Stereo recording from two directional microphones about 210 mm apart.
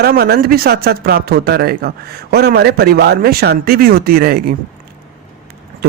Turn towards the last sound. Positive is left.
turn(degrees=-45)  # may be behind; listen again after turning